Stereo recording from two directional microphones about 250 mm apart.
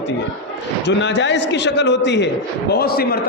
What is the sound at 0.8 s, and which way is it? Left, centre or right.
A man's voice, left.